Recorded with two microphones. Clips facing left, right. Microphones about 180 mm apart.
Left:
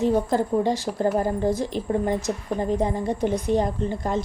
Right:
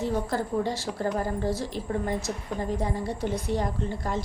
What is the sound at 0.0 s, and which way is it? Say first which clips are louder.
A woman's voice: left 7 dB; 20° left (ahead or behind).